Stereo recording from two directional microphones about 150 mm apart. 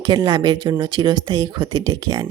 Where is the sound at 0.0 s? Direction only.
30° right (ahead or behind).